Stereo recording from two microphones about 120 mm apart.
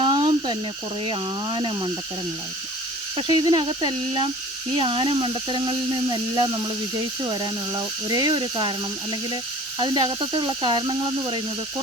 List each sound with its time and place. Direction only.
0.0 s snake: 40° right (ahead or behind)
1.0 s speech: 40° right (ahead or behind)
3.2 s speech: 40° right (ahead or behind)